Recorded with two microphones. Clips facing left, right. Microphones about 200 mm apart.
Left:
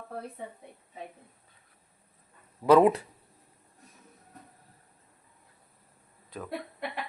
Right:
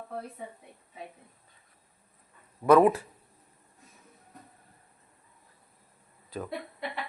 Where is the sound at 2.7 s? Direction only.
20° left (ahead or behind).